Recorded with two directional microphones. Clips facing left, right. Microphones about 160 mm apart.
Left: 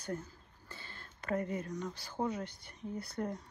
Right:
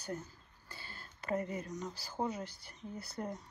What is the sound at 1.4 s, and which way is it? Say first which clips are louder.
Speech: left 2 dB; 55° left (ahead or behind).